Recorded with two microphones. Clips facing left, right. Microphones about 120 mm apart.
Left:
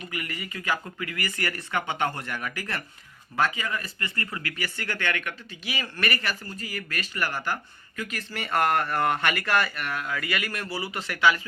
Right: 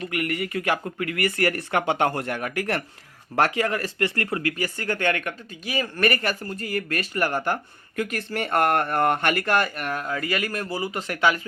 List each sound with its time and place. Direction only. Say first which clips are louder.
0.1 s speech: right 9 dB; 60° right (ahead or behind)
3.3 s speech: right 5 dB; 75° right (ahead or behind); by 11.3 s 45° right (ahead or behind)